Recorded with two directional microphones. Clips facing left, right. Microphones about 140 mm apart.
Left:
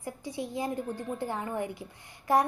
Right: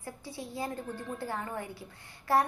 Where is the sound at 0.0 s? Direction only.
15° left (ahead or behind).